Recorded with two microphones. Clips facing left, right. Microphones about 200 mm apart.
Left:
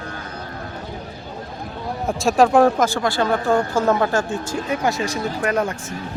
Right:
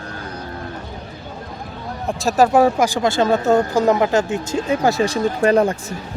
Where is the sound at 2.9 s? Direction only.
20° right (ahead or behind).